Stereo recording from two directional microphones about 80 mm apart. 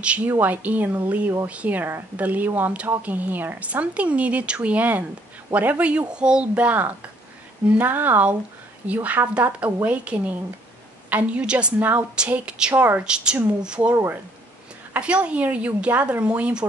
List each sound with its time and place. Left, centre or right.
0.0 s speech: centre
12.7 s speech: right
13.0 s speech: centre
15.0 s speech: centre